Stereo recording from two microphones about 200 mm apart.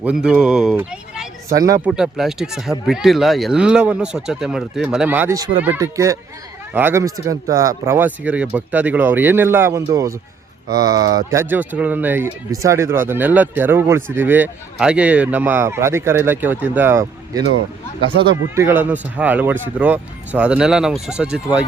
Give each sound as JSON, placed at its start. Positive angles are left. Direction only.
{"t": 0.0, "sound": "speech", "side_deg": -5}
{"t": 1.5, "sound": "speech", "side_deg": -15}
{"t": 1.8, "sound": "speech", "side_deg": -5}
{"t": 18.5, "sound": "speech", "side_deg": -10}